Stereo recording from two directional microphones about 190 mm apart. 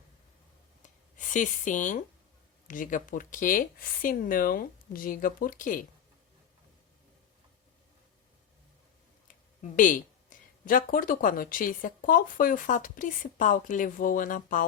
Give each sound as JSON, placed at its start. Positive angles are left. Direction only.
{"t": 0.8, "sound": "a sound", "side_deg": 40}
{"t": 2.6, "sound": "speech", "side_deg": 45}
{"t": 9.2, "sound": "speech", "side_deg": 40}